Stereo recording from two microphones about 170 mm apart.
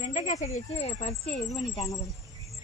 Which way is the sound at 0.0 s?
45° left (ahead or behind).